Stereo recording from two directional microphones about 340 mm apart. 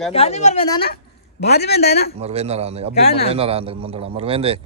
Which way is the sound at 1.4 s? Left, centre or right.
Left.